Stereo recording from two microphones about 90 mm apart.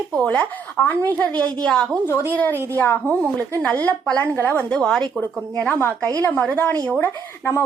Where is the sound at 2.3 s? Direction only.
20° left (ahead or behind).